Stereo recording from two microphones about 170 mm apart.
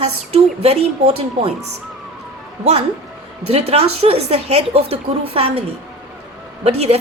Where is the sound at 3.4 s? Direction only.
40° right (ahead or behind).